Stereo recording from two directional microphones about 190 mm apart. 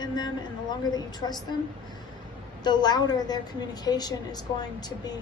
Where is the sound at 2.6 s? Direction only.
20° left (ahead or behind).